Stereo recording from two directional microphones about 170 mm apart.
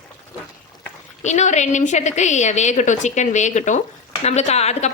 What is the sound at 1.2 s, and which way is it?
A woman's voice, 45° left (ahead or behind).